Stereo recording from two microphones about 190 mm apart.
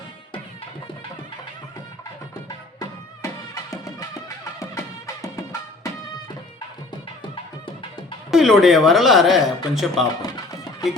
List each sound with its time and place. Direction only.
2.7 s music: 20° left (ahead or behind)
5.2 s music: 15° left (ahead or behind)
8.3 s a woman's voice: centre (ahead or behind)
10.5 s music: 20° left (ahead or behind)